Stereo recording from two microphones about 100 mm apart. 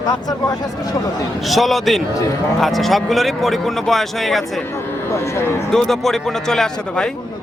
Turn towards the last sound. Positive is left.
turn(degrees=5)  # may be behind; listen again after turning